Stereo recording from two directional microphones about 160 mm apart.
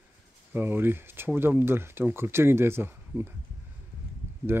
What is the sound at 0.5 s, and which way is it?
Speech, 15° right (ahead or behind).